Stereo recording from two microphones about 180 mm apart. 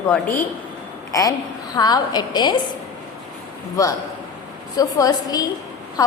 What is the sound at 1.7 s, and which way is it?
Speech, 20° left (ahead or behind).